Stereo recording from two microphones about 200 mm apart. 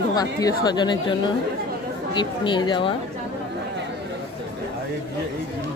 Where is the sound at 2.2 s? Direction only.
25° left (ahead or behind).